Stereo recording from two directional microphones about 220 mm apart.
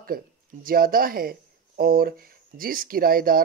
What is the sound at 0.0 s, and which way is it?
Speech, 40° right (ahead or behind).